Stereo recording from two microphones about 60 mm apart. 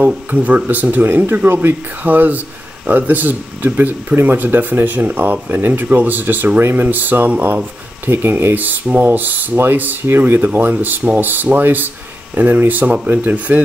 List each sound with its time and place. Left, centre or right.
0.0 s speech: right
1.0 s speech: right